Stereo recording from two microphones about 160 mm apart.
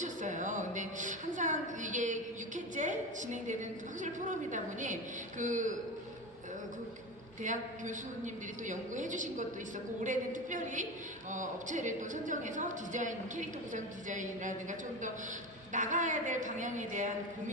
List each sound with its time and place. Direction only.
0.0 s a sound: 50° right (ahead or behind)
2.7 s a woman's voice: 50° right (ahead or behind)
7.4 s a woman's voice: 50° right (ahead or behind)